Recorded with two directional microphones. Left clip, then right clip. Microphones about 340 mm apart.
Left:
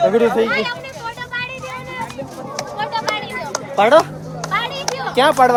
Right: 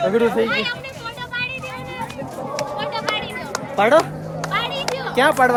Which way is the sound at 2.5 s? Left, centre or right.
Centre.